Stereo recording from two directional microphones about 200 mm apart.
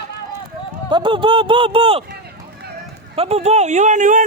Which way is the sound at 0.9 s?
20° right (ahead or behind).